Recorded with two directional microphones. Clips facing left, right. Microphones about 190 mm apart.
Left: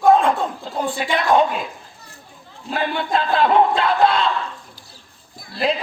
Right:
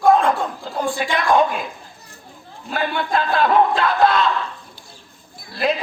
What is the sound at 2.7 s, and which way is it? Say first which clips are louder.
Battle cry: even; 25° left (ahead or behind).